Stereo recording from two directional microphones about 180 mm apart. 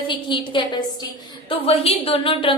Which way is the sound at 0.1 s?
25° left (ahead or behind).